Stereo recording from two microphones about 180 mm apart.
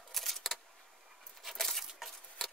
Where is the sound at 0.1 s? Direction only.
Centre (ahead or behind).